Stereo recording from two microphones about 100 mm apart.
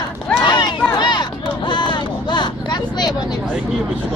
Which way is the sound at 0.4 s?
45° left (ahead or behind).